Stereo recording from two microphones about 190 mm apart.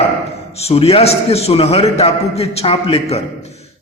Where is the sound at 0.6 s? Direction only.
30° left (ahead or behind).